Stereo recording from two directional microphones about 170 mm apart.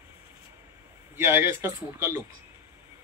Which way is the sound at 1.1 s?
15° right (ahead or behind).